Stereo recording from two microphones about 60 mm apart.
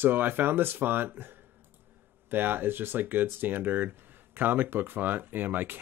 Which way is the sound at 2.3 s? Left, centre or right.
Right.